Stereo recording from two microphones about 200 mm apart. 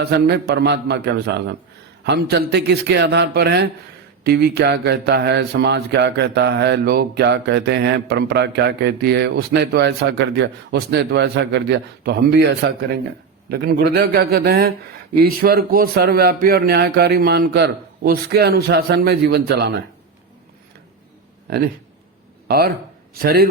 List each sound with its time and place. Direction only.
0.0 s a man's voice: 55° right (ahead or behind)
21.5 s a man's voice: 55° right (ahead or behind)